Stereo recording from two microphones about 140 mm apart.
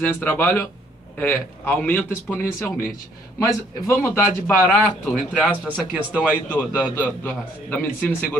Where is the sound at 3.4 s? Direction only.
20° left (ahead or behind).